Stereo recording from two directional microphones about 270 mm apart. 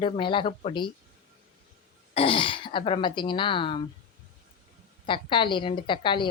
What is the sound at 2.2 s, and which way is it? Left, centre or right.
Speech, centre.